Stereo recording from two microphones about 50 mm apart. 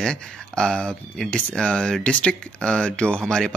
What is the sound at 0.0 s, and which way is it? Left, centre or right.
Speech, centre.